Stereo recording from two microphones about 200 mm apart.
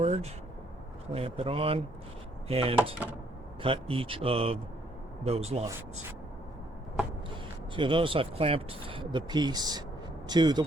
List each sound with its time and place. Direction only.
0.0 s speech: 30° right (ahead or behind)
7.8 s speech: 25° right (ahead or behind)